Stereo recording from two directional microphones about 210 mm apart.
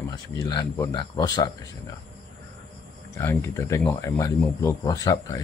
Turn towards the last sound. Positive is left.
turn(degrees=15)  # may be behind; listen again after turning